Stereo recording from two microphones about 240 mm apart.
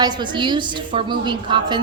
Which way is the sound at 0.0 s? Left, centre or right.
Centre.